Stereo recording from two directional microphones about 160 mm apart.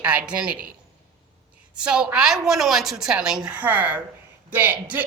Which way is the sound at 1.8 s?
5° right (ahead or behind).